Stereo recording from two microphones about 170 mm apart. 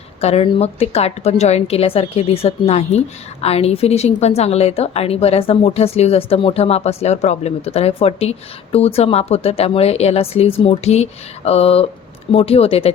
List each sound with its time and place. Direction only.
0.2 s a woman's voice: 35° left (ahead or behind)